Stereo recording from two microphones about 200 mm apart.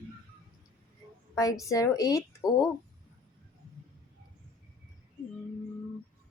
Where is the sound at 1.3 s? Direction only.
15° left (ahead or behind).